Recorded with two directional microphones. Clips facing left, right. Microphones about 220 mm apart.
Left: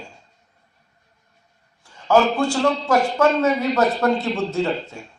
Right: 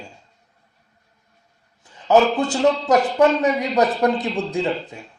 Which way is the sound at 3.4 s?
15° right (ahead or behind).